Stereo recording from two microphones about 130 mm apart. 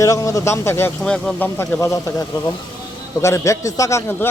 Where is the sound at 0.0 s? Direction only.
25° left (ahead or behind).